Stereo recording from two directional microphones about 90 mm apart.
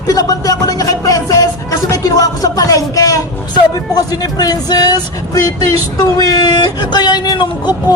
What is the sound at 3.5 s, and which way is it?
Speech, 45° left (ahead or behind).